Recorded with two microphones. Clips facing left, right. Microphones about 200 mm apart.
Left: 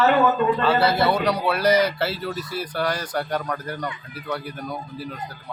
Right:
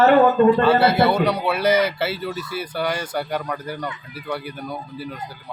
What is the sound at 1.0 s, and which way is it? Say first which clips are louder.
Speech: right 2 dB; 5° right (ahead or behind).